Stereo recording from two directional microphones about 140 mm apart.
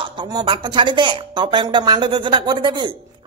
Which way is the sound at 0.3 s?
35° right (ahead or behind).